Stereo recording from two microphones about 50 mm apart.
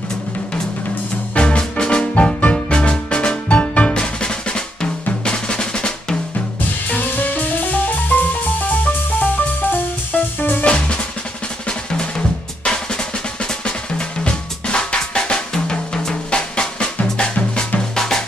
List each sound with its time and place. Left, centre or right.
1.3 s music: left
3.4 s drum: left
6.9 s music: left
10.6 s drum kit: left
12.6 s drum: centre
17.9 s drum: centre